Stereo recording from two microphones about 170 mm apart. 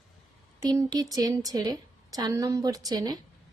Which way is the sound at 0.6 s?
20° right (ahead or behind).